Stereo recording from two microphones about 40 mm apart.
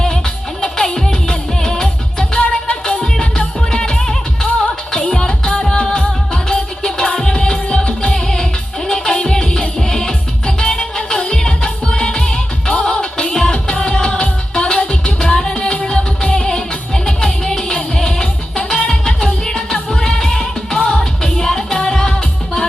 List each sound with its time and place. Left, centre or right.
0.6 s music: centre
2.4 s music: left
2.8 s music: left